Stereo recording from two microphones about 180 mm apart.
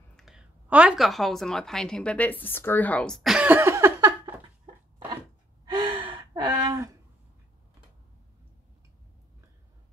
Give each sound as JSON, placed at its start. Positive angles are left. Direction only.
{"t": 0.1, "sound": "a woman's voice", "side_deg": 0}
{"t": 5.7, "sound": "gasp", "side_deg": -25}